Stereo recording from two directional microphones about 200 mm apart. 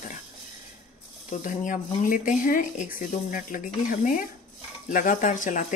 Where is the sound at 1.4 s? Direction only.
40° left (ahead or behind).